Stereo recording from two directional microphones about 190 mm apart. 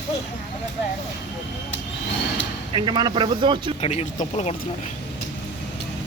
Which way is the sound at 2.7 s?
25° right (ahead or behind).